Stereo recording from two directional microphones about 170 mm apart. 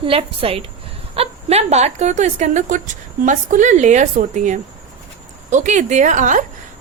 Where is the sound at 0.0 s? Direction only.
35° right (ahead or behind).